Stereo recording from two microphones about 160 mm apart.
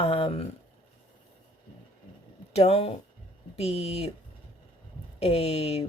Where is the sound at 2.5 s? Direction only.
40° left (ahead or behind).